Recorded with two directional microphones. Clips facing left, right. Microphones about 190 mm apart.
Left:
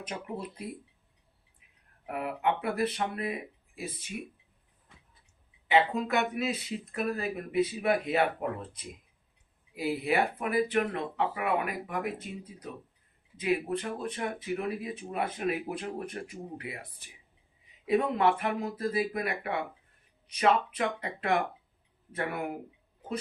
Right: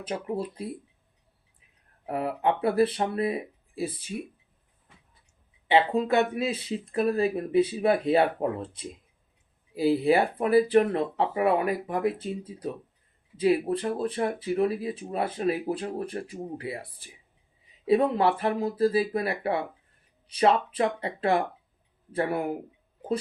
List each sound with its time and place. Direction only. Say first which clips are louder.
0.0 s speech: right 7 dB; 30° right (ahead or behind)
2.0 s speech: right 4 dB; 30° right (ahead or behind)
5.6 s speech: right 4 dB; 30° right (ahead or behind)